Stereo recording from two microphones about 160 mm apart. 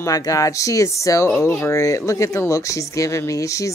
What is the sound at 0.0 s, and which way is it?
Speech, 20° left (ahead or behind).